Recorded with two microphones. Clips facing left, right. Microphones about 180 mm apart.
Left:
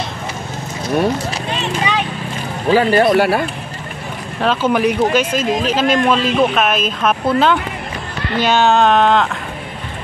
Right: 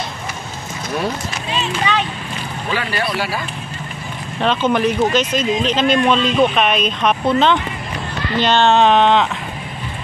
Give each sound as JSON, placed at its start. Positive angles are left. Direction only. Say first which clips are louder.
{"t": 2.7, "sound": "speech", "louder": "left 11 dB", "side_deg": 45}
{"t": 4.4, "sound": "speech", "louder": "left 1 dB", "side_deg": 5}